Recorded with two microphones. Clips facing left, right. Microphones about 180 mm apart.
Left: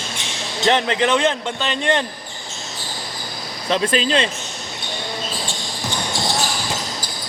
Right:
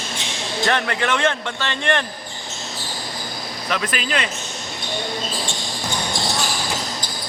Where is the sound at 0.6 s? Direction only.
20° left (ahead or behind).